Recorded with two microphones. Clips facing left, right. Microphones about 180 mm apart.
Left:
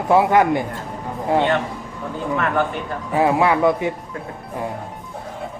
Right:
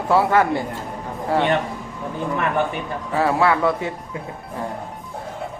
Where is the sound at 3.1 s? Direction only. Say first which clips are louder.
Left 2 dB; 20° left (ahead or behind).